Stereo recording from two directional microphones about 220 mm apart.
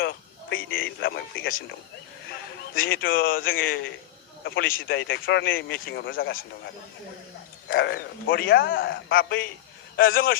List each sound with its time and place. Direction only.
0.7 s speech: 45° left (ahead or behind)
7.7 s speech: 45° left (ahead or behind)
9.9 s speech: 40° left (ahead or behind)